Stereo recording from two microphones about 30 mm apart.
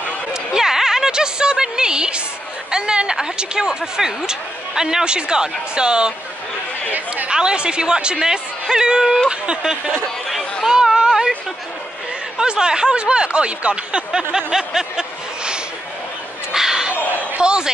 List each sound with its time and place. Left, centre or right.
0.6 s a sound: centre
2.7 s speech: right
7.2 s a woman's voice: right
8.2 s speech: centre
9.3 s a woman's voice: right
10.7 s a sound: right
12.4 s speech: right
14.1 s speech: right
16.5 s a sound: centre
17.4 s a man's voice: right